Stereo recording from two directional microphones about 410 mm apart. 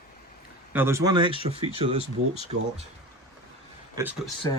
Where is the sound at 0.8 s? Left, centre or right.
Centre.